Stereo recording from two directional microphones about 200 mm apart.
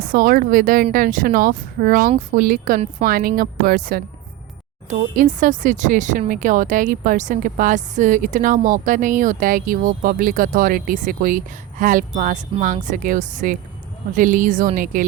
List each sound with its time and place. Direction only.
0.0 s speech: 45° right (ahead or behind)